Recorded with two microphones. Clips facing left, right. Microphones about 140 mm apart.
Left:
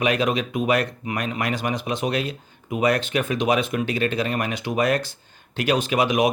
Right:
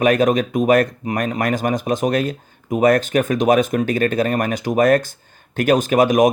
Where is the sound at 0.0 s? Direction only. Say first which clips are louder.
Right 6 dB; 45° right (ahead or behind).